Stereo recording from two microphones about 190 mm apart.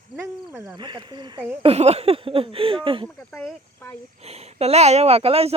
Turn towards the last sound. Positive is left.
turn(degrees=-30)  # may be behind; listen again after turning